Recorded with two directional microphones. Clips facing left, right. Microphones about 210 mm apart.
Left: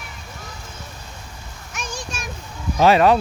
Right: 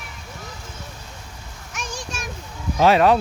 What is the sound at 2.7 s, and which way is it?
Speech, centre (ahead or behind).